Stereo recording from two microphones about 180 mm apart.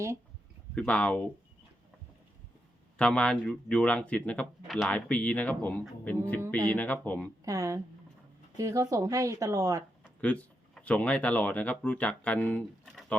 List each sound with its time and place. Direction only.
0.8 s speech: 5° left (ahead or behind)
3.0 s speech: 5° left (ahead or behind)
7.4 s speech: 20° right (ahead or behind)
10.0 s speech: 10° left (ahead or behind)